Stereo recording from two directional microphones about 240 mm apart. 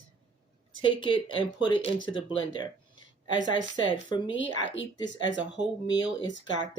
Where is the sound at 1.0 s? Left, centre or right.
Centre.